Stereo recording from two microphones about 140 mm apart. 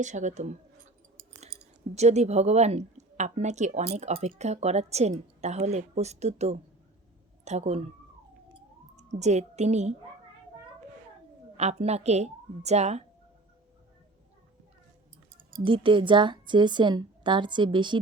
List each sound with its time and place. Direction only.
0.0 s speech: 60° right (ahead or behind)
2.0 s speech: 50° right (ahead or behind)
9.0 s a woman's voice: 55° right (ahead or behind)
11.5 s speech: 50° right (ahead or behind)
15.6 s a woman's voice: 35° right (ahead or behind)